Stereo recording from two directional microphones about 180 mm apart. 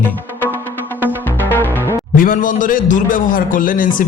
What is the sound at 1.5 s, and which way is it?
Music, 10° left (ahead or behind).